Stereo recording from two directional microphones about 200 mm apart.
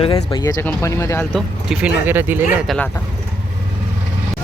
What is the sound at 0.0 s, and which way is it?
Speech, 20° left (ahead or behind).